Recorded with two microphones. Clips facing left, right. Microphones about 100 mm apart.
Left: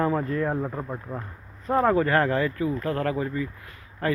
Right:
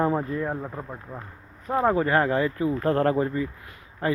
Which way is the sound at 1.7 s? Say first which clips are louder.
Left 1 dB; 15° right (ahead or behind).